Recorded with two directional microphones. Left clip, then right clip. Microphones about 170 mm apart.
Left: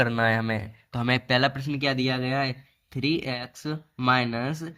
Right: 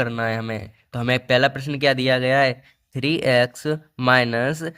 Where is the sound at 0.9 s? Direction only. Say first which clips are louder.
Right 5 dB; 25° right (ahead or behind).